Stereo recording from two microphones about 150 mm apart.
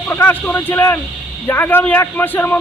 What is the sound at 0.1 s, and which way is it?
A man's voice, 10° left (ahead or behind).